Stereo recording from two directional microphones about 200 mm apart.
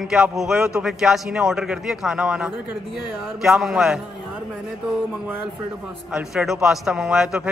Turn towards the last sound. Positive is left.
turn(degrees=-5)  # may be behind; listen again after turning